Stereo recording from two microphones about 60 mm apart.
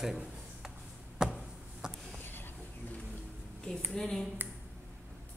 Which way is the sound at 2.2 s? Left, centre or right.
Left.